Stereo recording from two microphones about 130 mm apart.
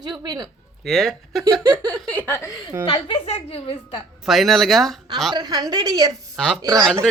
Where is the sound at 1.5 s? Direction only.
30° right (ahead or behind).